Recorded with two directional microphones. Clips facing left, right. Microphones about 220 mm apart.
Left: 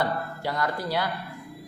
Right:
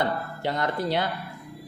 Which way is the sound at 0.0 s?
20° right (ahead or behind).